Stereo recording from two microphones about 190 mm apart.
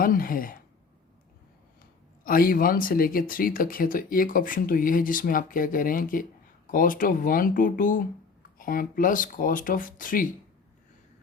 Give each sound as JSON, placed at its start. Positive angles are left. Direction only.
{"t": 0.0, "sound": "speech", "side_deg": 50}
{"t": 2.2, "sound": "speech", "side_deg": 50}